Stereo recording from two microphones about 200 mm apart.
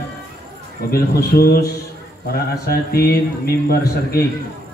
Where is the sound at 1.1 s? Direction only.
50° left (ahead or behind).